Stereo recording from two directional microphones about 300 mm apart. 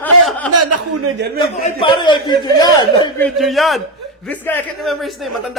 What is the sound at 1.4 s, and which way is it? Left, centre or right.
Speech, centre.